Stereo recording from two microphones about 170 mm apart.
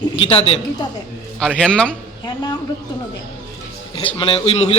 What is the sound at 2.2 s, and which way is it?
Speech, 25° left (ahead or behind).